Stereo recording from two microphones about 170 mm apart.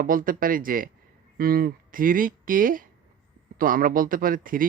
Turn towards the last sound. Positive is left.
turn(degrees=-55)  # may be behind; listen again after turning